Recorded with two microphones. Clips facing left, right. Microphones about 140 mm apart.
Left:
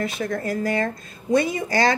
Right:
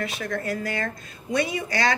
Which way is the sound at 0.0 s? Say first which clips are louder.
Left 3 dB; 35° left (ahead or behind).